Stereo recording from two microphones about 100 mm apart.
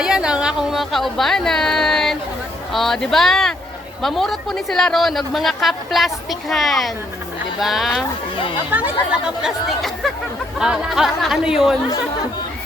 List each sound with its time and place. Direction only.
0.0 s speech: 5° right (ahead or behind)
8.7 s speech: 20° right (ahead or behind)
9.4 s speech: centre (ahead or behind)